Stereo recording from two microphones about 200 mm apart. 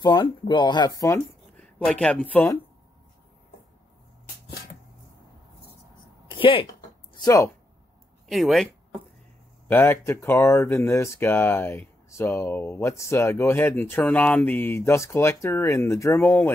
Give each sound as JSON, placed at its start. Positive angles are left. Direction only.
{"t": 0.0, "sound": "speech", "side_deg": 20}
{"t": 1.9, "sound": "speech", "side_deg": 5}
{"t": 6.3, "sound": "speech", "side_deg": 25}
{"t": 7.2, "sound": "speech", "side_deg": 15}
{"t": 8.3, "sound": "speech", "side_deg": 0}
{"t": 9.7, "sound": "speech", "side_deg": 10}